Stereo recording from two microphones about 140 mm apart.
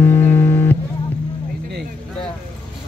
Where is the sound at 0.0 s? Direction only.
15° left (ahead or behind).